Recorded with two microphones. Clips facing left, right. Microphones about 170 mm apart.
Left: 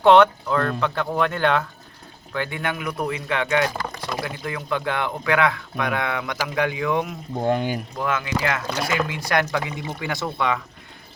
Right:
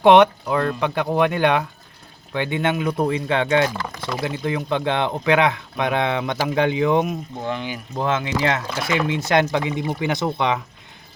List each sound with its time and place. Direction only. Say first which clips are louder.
0.0 s speech: right 2 dB; 15° right (ahead or behind)
7.4 s speech: left 6 dB; 45° left (ahead or behind)
7.9 s speech: right 6 dB; 25° right (ahead or behind)